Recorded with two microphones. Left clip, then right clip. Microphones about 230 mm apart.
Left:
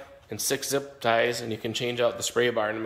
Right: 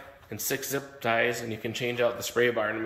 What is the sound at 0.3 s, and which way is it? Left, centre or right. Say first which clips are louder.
Speech: left 4 dB; centre.